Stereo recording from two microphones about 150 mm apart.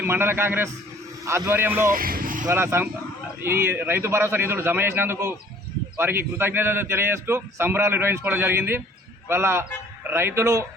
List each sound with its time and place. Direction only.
0.0 s a man's voice: 15° right (ahead or behind)
1.9 s vehicle: 70° right (ahead or behind)
2.5 s a man's voice: 15° right (ahead or behind)